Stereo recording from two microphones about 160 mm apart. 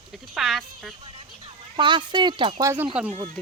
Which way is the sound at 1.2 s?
30° right (ahead or behind).